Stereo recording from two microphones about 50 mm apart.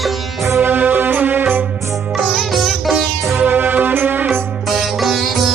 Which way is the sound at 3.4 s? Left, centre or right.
Right.